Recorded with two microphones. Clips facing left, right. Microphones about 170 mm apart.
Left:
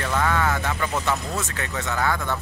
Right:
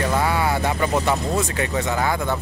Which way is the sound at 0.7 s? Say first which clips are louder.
Right 5 dB; 35° right (ahead or behind).